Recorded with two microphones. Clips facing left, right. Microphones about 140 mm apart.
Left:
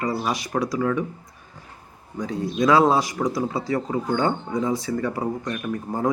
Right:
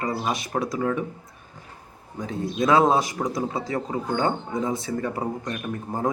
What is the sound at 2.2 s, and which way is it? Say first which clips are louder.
Speech: left 2 dB; 25° right (ahead or behind).